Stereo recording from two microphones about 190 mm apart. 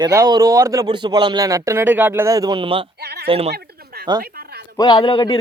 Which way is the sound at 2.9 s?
55° right (ahead or behind).